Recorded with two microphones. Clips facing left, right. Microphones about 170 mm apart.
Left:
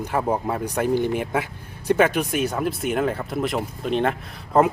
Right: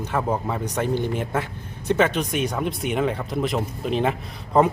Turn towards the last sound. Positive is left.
turn(degrees=0)  # may be behind; listen again after turning